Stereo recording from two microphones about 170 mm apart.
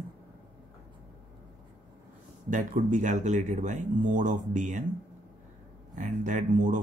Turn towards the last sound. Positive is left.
turn(degrees=-50)  # may be behind; listen again after turning